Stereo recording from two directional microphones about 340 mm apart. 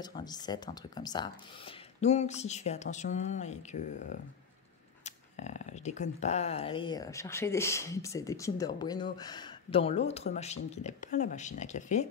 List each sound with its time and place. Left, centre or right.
0.0 s speech: centre